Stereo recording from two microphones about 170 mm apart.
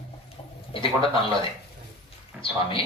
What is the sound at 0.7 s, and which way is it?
Speech, 30° left (ahead or behind).